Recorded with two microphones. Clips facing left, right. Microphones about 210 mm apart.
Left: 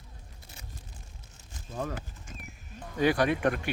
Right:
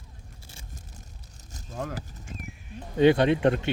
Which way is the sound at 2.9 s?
25° right (ahead or behind).